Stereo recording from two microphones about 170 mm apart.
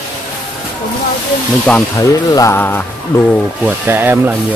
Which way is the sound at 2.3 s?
20° left (ahead or behind).